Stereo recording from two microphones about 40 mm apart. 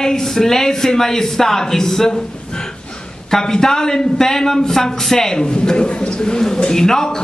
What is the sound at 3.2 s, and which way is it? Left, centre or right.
Speech, centre.